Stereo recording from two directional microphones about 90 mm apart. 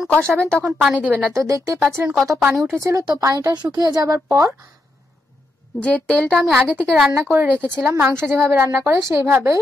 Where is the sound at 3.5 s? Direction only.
50° right (ahead or behind).